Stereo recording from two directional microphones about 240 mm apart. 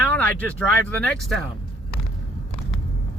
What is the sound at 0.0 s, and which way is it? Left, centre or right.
Speech, centre.